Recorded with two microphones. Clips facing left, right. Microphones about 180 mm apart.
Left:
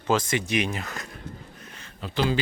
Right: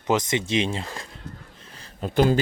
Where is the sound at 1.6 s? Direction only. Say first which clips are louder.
Right 5 dB; 35° right (ahead or behind).